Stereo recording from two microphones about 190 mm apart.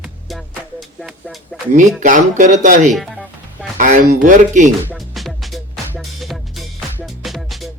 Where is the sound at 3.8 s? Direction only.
45° right (ahead or behind).